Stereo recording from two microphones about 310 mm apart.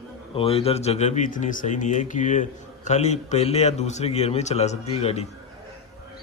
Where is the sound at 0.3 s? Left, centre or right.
Centre.